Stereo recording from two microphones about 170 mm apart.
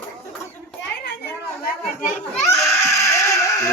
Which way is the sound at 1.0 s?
75° left (ahead or behind).